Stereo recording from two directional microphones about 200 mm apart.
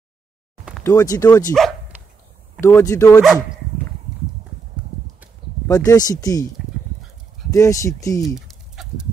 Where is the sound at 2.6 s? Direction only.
15° left (ahead or behind).